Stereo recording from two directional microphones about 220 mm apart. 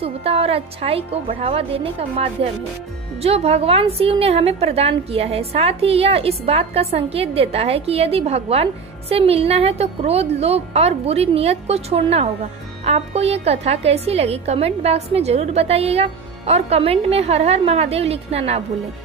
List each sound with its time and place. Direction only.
0.0 s a woman's voice: 25° right (ahead or behind)